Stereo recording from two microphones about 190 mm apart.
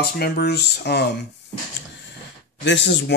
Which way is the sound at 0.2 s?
60° left (ahead or behind).